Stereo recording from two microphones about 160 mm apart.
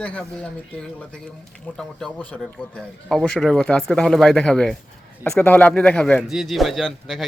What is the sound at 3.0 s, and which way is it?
Speech, 5° left (ahead or behind).